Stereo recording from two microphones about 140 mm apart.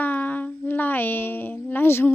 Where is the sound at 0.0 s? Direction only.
15° left (ahead or behind).